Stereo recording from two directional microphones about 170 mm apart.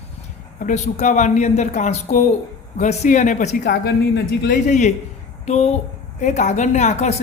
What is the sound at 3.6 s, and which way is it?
Speech, 90° left.